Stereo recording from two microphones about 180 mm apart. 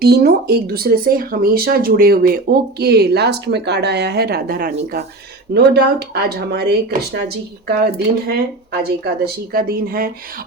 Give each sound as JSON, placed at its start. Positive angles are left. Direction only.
{"t": 0.0, "sound": "speech", "side_deg": -60}
{"t": 5.5, "sound": "speech", "side_deg": -65}